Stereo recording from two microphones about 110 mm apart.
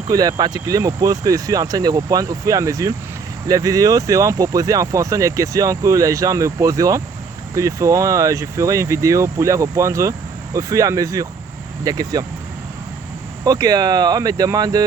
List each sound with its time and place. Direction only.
0.1 s speech: 35° right (ahead or behind)
13.4 s speech: 30° right (ahead or behind)